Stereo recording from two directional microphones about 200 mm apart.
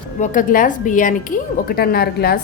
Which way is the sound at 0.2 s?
40° left (ahead or behind).